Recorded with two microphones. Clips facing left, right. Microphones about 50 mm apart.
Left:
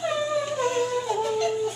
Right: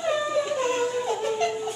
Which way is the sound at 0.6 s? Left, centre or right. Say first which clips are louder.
Even; right.